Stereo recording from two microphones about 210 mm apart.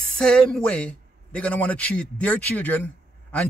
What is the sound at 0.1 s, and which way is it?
A man's voice, 5° left (ahead or behind).